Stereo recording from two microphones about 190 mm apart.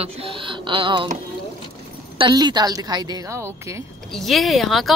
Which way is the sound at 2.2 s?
20° right (ahead or behind).